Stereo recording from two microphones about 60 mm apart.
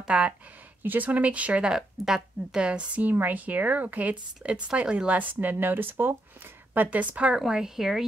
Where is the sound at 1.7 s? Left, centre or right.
Centre; by 4.2 s right.